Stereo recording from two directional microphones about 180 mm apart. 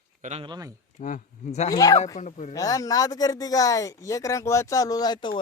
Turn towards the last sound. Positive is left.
turn(degrees=25)  # may be behind; listen again after turning